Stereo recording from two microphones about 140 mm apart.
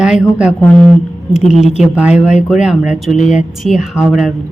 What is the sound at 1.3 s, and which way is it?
A woman's voice, 5° right (ahead or behind).